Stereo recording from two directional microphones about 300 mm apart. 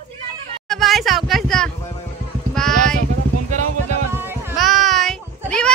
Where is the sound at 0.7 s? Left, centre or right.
Centre.